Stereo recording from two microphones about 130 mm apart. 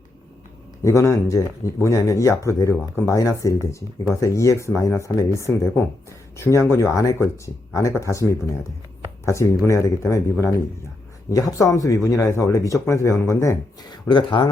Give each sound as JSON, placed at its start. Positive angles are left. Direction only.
{"t": 0.8, "sound": "speech", "side_deg": 20}
{"t": 13.9, "sound": "speech", "side_deg": 35}